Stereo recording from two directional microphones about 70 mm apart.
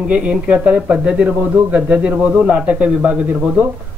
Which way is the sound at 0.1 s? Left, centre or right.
Centre.